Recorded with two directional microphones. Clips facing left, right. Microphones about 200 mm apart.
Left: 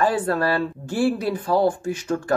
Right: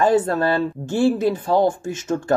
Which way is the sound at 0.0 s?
25° right (ahead or behind).